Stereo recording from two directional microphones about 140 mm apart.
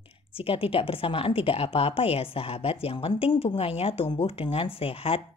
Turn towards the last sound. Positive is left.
turn(degrees=40)  # may be behind; listen again after turning